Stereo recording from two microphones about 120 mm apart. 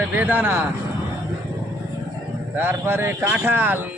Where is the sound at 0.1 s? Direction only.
15° right (ahead or behind).